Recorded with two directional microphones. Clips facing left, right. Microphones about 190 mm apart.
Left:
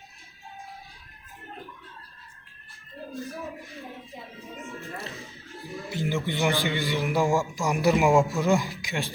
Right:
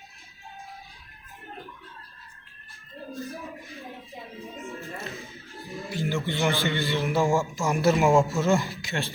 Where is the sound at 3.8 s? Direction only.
15° right (ahead or behind).